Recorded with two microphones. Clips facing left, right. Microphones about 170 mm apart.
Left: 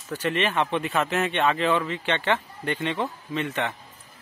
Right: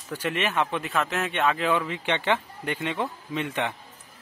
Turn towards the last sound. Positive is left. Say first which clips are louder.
# left 1 dB
turn(degrees=-15)  # may be behind; listen again after turning